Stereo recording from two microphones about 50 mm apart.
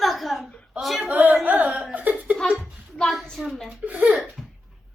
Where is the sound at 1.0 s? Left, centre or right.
Right.